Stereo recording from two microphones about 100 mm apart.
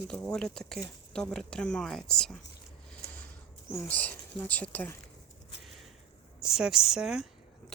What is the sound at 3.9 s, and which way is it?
Speech, 15° left (ahead or behind).